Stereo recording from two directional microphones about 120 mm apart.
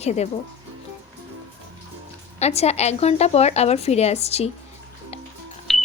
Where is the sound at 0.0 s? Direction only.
65° left (ahead or behind).